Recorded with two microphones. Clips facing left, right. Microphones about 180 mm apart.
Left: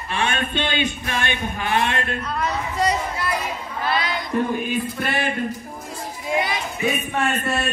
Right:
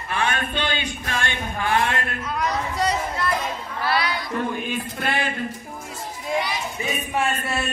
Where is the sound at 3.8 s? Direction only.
20° left (ahead or behind).